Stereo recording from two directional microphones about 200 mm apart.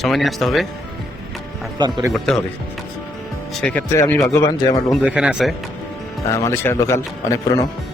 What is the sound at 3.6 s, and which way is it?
Speech, 10° left (ahead or behind).